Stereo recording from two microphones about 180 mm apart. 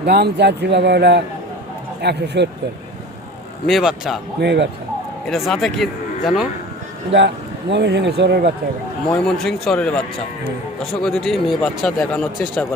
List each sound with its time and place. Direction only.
0.0 s speech: 65° right (ahead or behind)
3.7 s speech: centre (ahead or behind)
4.4 s speech: 70° right (ahead or behind)
5.2 s speech: centre (ahead or behind)
7.1 s speech: 75° right (ahead or behind)
9.2 s speech: centre (ahead or behind)
11.0 s speech: centre (ahead or behind)